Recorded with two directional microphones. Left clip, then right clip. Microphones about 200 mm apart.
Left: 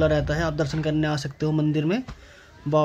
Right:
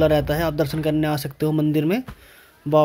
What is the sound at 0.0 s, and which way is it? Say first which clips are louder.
Speech: right 4 dB; 10° right (ahead or behind).